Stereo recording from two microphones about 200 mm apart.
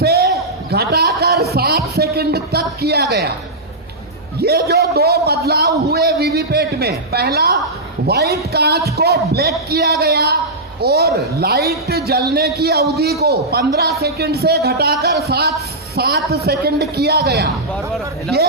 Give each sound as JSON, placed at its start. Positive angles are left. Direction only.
{"t": 0.0, "sound": "basketball bounce", "side_deg": -55}
{"t": 0.7, "sound": "a man's voice", "side_deg": -55}
{"t": 4.4, "sound": "a man's voice", "side_deg": -55}